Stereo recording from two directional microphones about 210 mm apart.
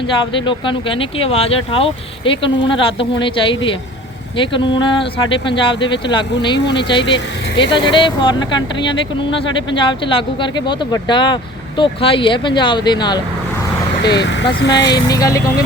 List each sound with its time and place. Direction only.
0.3 s speech: 25° left (ahead or behind)
7.0 s speech: 60° left (ahead or behind)
7.6 s speech: 25° left (ahead or behind)
14.0 s speech: 55° left (ahead or behind)
14.8 s speech: 20° left (ahead or behind)